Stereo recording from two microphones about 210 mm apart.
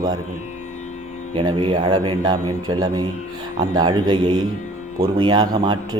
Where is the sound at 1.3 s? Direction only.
25° right (ahead or behind).